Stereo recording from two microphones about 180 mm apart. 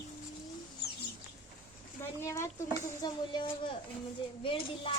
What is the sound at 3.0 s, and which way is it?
Speech, 25° left (ahead or behind).